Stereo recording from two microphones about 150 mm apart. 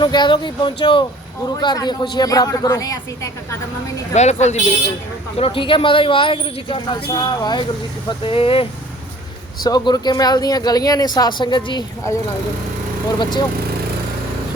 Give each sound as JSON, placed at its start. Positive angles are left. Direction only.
{"t": 0.0, "sound": "speech", "side_deg": 30}
{"t": 4.1, "sound": "a woman's voice", "side_deg": 50}
{"t": 5.4, "sound": "speech", "side_deg": 35}
{"t": 9.6, "sound": "speech", "side_deg": 25}